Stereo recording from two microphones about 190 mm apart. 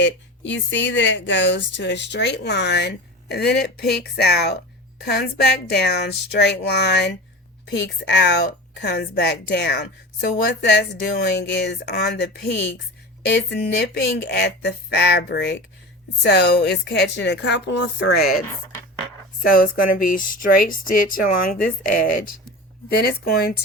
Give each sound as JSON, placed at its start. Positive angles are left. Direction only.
{"t": 0.0, "sound": "speech", "side_deg": 70}
{"t": 19.5, "sound": "speech", "side_deg": 50}